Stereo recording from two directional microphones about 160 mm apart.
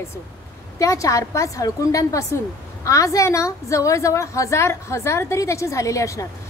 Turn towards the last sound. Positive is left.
turn(degrees=20)  # may be behind; listen again after turning